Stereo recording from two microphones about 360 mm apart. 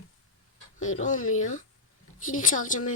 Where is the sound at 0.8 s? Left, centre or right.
Left.